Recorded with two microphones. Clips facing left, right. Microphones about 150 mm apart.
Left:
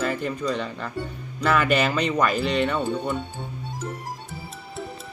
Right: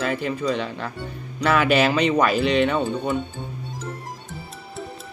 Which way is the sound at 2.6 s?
15° right (ahead or behind).